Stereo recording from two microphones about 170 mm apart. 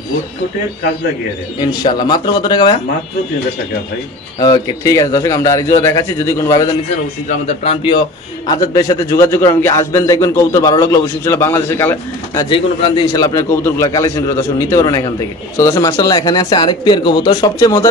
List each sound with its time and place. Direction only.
1.6 s a man's voice: 25° left (ahead or behind)
4.4 s a man's voice: 20° left (ahead or behind)
7.2 s a man's voice: 35° left (ahead or behind)
8.5 s a man's voice: 20° left (ahead or behind)
12.4 s a man's voice: 25° left (ahead or behind)